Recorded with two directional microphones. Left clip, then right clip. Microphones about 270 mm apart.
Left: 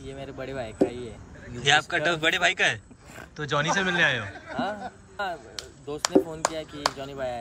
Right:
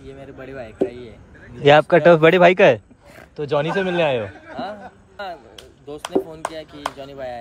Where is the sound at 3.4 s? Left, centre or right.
Centre.